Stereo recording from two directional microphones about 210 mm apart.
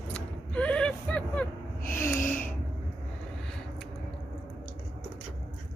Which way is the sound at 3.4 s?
Centre (ahead or behind).